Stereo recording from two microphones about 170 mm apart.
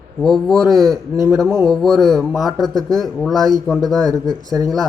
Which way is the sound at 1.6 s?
Centre (ahead or behind).